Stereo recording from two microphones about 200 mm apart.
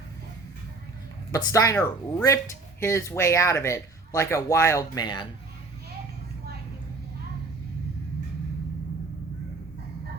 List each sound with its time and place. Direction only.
1.3 s speech: 15° left (ahead or behind)